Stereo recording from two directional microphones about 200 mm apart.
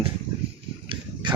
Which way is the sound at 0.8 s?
25° right (ahead or behind).